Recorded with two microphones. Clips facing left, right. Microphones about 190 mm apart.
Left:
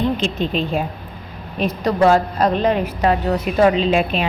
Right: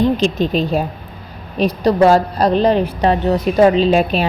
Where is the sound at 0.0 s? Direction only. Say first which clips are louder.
Right 5 dB; 40° right (ahead or behind).